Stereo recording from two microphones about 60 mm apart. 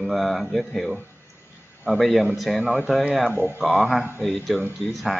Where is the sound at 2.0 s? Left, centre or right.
Centre.